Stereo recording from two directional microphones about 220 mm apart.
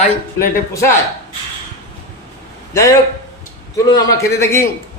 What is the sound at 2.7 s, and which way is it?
Speech, 15° left (ahead or behind).